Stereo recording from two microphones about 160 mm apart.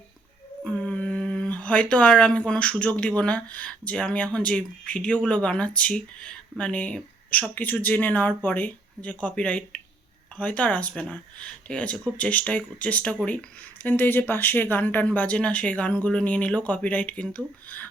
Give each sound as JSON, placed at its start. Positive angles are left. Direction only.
{"t": 0.6, "sound": "speech", "side_deg": 5}